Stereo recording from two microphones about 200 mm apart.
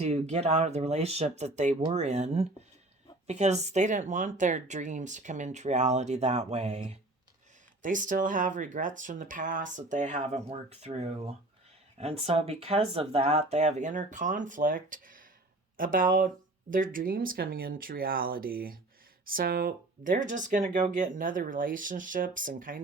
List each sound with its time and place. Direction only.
0.0 s speech: 35° right (ahead or behind)